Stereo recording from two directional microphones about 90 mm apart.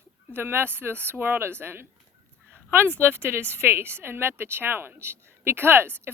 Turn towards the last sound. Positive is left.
turn(degrees=-25)  # may be behind; listen again after turning